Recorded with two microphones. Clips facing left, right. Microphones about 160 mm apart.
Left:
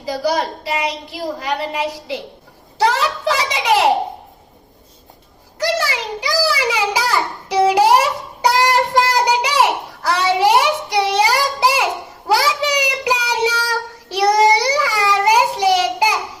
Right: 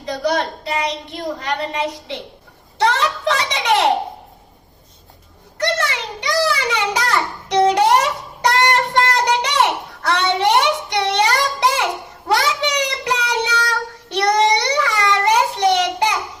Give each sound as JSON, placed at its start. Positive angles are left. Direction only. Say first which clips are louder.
{"t": 0.0, "sound": "a woman's voice", "louder": "left 1 dB", "side_deg": 5}
{"t": 5.5, "sound": "a sound", "louder": "left 1 dB", "side_deg": 5}
{"t": 12.3, "sound": "child singing", "louder": "left 2 dB", "side_deg": 5}